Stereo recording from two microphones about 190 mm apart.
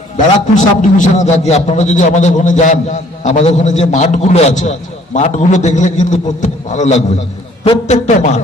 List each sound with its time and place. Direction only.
0.5 s a man's voice: 40° left (ahead or behind)